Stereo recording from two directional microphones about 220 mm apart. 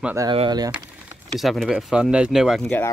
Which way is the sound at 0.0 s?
15° right (ahead or behind).